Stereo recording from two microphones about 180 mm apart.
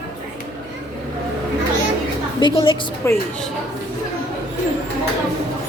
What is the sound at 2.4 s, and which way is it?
Speech, 25° left (ahead or behind).